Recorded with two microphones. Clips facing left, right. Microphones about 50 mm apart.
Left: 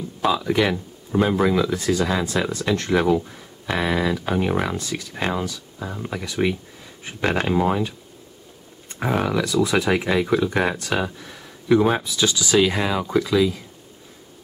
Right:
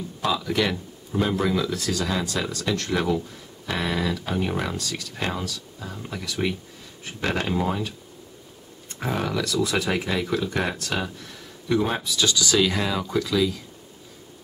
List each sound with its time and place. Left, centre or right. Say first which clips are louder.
0.3 s speech: left 4 dB; centre